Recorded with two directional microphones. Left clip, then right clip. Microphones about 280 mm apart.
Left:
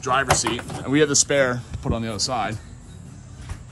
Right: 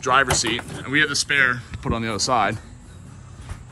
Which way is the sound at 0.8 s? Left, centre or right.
Centre.